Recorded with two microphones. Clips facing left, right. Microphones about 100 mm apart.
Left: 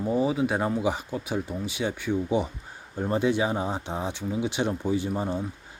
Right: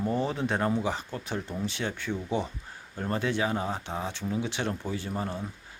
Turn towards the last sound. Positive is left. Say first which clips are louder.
# left 5 dB
turn(degrees=15)  # may be behind; listen again after turning